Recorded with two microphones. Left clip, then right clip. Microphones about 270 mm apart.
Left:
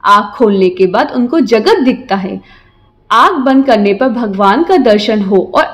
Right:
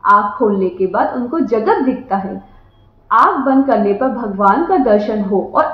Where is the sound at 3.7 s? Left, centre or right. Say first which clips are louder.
Left 5 dB; left.